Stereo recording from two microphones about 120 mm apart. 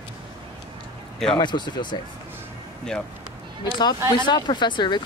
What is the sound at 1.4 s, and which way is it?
Speech, 40° left (ahead or behind).